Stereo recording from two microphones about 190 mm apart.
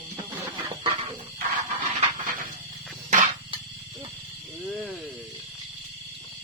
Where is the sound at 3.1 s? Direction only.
40° right (ahead or behind).